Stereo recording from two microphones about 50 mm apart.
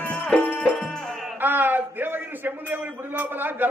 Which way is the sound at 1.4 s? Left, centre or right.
Right.